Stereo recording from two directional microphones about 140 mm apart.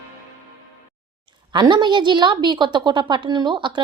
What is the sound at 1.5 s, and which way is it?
A woman's voice, 30° right (ahead or behind).